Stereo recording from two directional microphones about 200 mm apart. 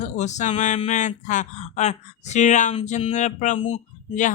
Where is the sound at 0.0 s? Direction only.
35° left (ahead or behind).